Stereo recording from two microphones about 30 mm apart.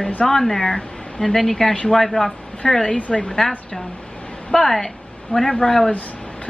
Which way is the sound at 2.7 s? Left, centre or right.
Left.